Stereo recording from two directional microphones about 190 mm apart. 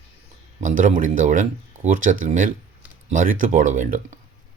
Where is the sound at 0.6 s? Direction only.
40° right (ahead or behind).